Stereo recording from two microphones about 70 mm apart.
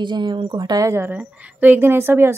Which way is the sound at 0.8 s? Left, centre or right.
Right.